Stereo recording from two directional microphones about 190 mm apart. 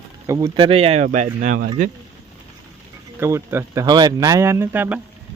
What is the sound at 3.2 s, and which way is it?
Speech, 15° right (ahead or behind).